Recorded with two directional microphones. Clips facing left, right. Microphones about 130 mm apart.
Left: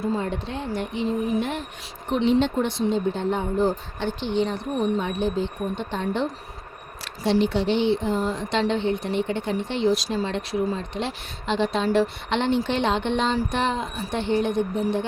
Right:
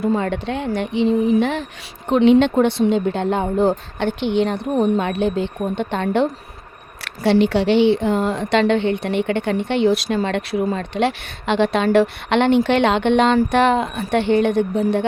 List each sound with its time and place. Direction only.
0.0 s speech: 65° right (ahead or behind); by 1.6 s 90° right
2.0 s speech: 70° right (ahead or behind)